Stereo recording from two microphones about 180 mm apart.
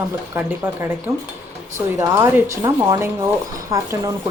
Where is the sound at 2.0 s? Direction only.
15° right (ahead or behind).